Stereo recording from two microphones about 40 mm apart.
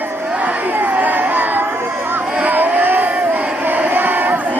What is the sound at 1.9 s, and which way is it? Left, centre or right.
Chatter, right.